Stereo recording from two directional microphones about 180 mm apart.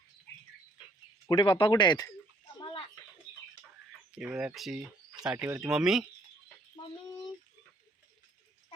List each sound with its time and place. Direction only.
1.3 s speech: 25° left (ahead or behind)
2.6 s a sound: 20° left (ahead or behind)
4.2 s speech: 5° right (ahead or behind)
5.7 s speech: centre (ahead or behind)